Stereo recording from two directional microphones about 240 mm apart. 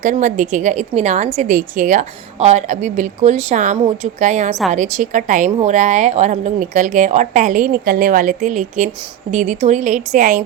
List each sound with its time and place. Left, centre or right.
0.0 s a woman's voice: right